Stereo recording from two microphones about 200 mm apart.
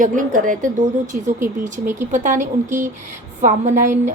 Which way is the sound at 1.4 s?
10° right (ahead or behind).